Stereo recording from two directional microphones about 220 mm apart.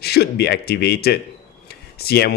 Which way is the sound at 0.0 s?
45° left (ahead or behind).